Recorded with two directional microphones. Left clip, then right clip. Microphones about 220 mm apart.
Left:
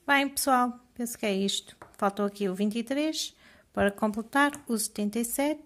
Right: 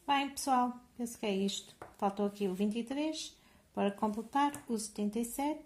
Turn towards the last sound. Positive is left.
turn(degrees=35)  # may be behind; listen again after turning